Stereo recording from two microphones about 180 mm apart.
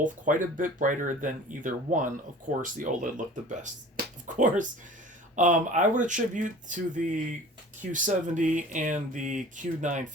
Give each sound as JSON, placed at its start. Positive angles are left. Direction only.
{"t": 0.0, "sound": "speech", "side_deg": -45}